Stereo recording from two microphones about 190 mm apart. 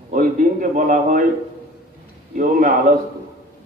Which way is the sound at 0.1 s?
45° right (ahead or behind).